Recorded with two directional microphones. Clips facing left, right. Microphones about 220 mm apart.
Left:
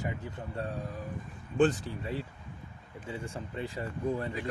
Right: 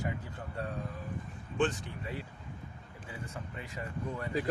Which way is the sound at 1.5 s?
35° left (ahead or behind).